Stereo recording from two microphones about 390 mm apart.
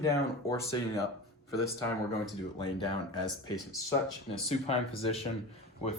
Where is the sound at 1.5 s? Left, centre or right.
Centre.